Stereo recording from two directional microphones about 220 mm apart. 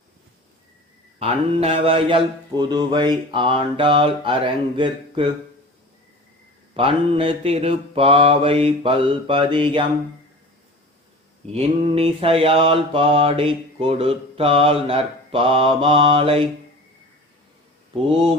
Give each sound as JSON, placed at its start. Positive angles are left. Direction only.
{"t": 1.2, "sound": "mantra", "side_deg": -25}
{"t": 6.7, "sound": "mantra", "side_deg": -25}
{"t": 11.5, "sound": "mantra", "side_deg": -25}
{"t": 17.9, "sound": "mantra", "side_deg": -25}